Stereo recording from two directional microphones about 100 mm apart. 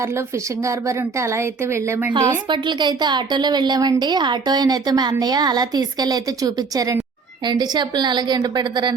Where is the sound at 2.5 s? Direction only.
50° right (ahead or behind).